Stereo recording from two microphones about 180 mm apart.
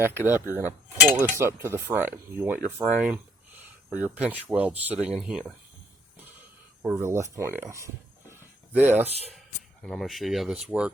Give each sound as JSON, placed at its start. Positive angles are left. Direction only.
{"t": 0.3, "sound": "cutlery", "side_deg": -10}
{"t": 2.6, "sound": "speech", "side_deg": -10}
{"t": 4.0, "sound": "cutlery", "side_deg": -10}
{"t": 6.8, "sound": "cutlery", "side_deg": -15}
{"t": 8.3, "sound": "a sound", "side_deg": -10}
{"t": 9.8, "sound": "speech", "side_deg": 0}